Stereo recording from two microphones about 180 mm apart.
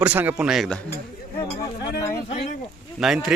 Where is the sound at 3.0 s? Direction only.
Centre (ahead or behind).